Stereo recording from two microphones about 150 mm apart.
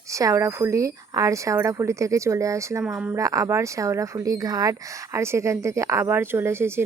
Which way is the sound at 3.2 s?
20° right (ahead or behind).